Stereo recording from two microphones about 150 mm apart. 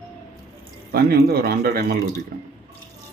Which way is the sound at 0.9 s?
90° right.